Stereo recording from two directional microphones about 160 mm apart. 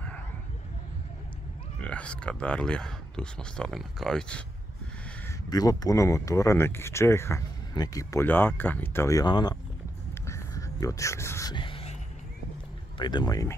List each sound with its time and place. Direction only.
1.8 s speech: 5° left (ahead or behind)
5.5 s speech: 25° left (ahead or behind)
10.2 s a sound: 20° left (ahead or behind)
11.5 s music: 35° left (ahead or behind)
12.9 s speech: 25° left (ahead or behind)